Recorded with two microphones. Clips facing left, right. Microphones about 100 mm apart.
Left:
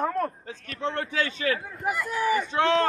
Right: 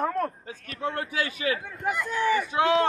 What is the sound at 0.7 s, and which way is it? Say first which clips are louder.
Speech: left 1 dB; 10° right (ahead or behind).